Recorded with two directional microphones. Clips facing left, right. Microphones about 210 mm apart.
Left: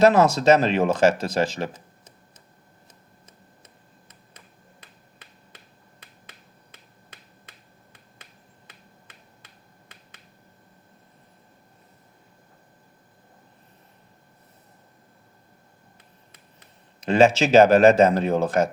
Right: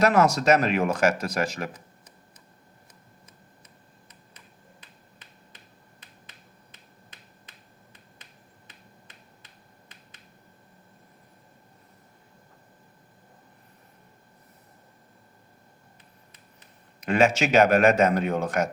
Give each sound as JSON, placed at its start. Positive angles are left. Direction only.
{"t": 0.0, "sound": "speech", "side_deg": 30}
{"t": 17.0, "sound": "speech", "side_deg": 30}